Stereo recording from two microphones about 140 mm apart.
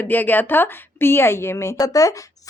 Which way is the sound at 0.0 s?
15° left (ahead or behind).